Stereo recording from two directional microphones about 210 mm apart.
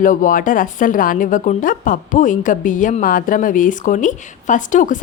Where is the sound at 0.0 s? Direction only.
40° left (ahead or behind).